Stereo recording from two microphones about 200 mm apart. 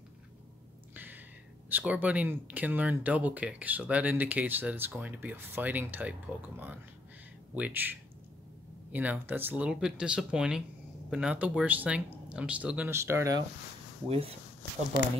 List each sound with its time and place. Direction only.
0.9 s a sound: 10° right (ahead or behind)
1.7 s speech: 10° right (ahead or behind)
14.0 s speech: 30° right (ahead or behind)